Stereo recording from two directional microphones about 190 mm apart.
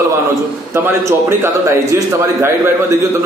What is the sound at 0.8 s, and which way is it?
A man's voice, 15° right (ahead or behind).